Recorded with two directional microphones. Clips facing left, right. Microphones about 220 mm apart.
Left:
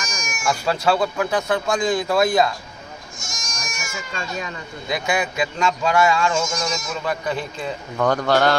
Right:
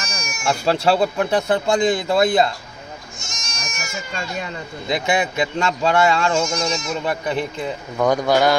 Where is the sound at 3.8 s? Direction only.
30° right (ahead or behind); by 8.5 s 10° right (ahead or behind).